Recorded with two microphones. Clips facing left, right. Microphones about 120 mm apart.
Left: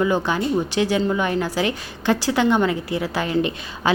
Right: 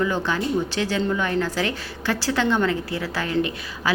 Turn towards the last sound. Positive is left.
turn(degrees=20)  # may be behind; listen again after turning